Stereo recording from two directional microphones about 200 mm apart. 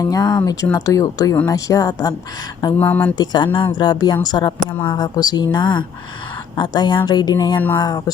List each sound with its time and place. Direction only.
0.0 s speech: 20° left (ahead or behind)
3.2 s speech: 25° left (ahead or behind)